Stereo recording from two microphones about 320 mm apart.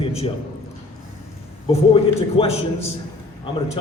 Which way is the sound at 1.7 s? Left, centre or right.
Centre.